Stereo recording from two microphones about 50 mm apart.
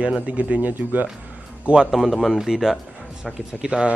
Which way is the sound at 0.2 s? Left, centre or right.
Right.